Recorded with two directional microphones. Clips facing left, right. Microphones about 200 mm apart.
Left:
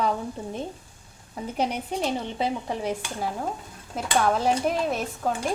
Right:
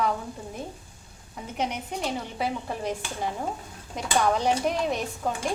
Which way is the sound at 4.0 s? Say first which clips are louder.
Left 1 dB; 5° left (ahead or behind).